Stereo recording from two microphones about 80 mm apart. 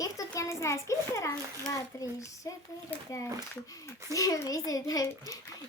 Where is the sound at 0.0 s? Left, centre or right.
Left.